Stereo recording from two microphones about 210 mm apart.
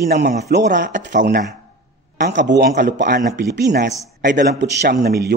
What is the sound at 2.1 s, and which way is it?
A man's voice, 50° right (ahead or behind).